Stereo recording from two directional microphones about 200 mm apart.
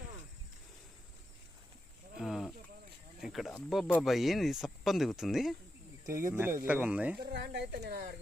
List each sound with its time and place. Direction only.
2.1 s cricket: centre (ahead or behind)
3.2 s speech: centre (ahead or behind)
6.1 s speech: 15° right (ahead or behind)
7.2 s speech: 50° right (ahead or behind)